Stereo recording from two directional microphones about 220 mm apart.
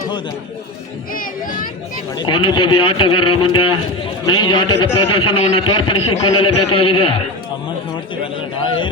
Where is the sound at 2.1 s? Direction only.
20° left (ahead or behind).